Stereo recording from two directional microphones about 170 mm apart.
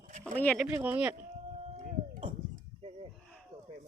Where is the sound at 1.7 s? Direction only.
45° right (ahead or behind).